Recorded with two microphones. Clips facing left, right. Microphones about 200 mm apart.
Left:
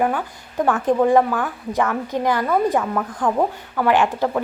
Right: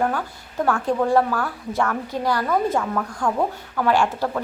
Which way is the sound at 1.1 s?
15° left (ahead or behind).